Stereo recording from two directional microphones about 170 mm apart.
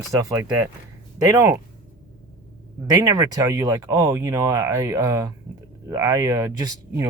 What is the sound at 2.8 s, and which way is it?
Speech, 20° right (ahead or behind).